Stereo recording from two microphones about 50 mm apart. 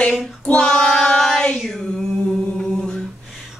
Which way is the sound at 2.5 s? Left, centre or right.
Centre.